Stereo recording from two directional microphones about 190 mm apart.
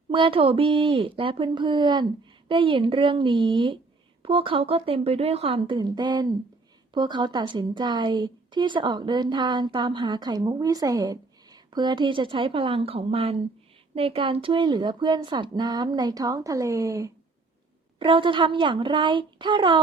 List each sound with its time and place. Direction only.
0.1 s a woman's voice: 30° right (ahead or behind)
18.0 s a woman's voice: 25° right (ahead or behind)